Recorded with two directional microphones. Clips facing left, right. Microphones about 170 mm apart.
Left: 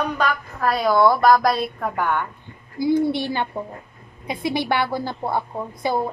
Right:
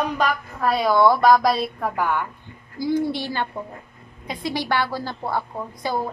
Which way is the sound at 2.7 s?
55° left (ahead or behind).